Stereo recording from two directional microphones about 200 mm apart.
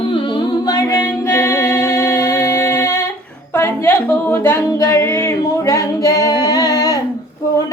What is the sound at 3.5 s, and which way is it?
Singing, 10° left (ahead or behind).